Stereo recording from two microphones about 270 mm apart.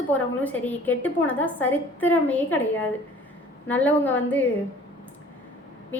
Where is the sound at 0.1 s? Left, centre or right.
Centre.